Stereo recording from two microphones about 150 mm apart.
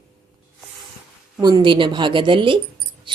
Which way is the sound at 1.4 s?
30° right (ahead or behind).